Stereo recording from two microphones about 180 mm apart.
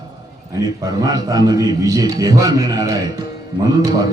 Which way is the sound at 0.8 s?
20° right (ahead or behind).